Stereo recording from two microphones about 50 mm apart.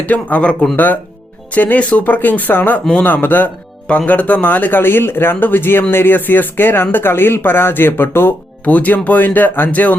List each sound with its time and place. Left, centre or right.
0.0 s speech: left
1.5 s a man's voice: left
8.6 s a man's voice: left